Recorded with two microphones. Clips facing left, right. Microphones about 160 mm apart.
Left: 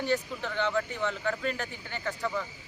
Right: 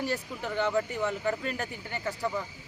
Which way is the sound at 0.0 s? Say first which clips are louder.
Left 2 dB; 10° right (ahead or behind).